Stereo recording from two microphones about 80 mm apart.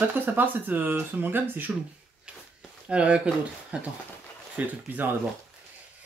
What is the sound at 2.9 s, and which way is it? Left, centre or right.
Speech, centre.